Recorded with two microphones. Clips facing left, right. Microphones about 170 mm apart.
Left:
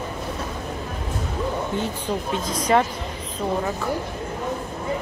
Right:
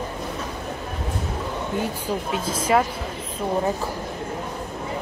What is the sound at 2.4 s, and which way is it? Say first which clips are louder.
Speech: left 1 dB; 5° right (ahead or behind).